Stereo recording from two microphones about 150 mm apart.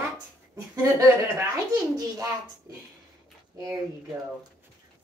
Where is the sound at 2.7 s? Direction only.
20° right (ahead or behind).